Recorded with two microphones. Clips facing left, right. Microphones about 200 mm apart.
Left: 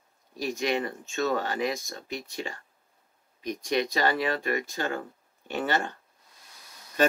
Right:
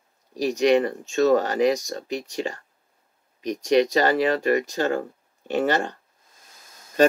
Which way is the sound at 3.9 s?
40° right (ahead or behind).